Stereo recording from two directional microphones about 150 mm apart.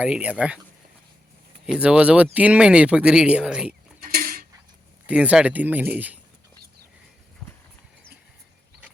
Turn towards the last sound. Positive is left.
turn(degrees=0)  # may be behind; listen again after turning